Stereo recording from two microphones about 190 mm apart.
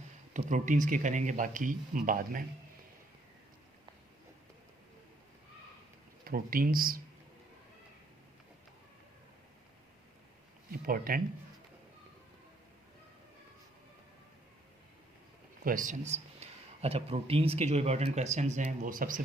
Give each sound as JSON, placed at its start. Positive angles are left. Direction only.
{"t": 0.3, "sound": "speech", "side_deg": -40}
{"t": 6.2, "sound": "speech", "side_deg": -50}
{"t": 10.7, "sound": "speech", "side_deg": -50}
{"t": 15.6, "sound": "a man's voice", "side_deg": -45}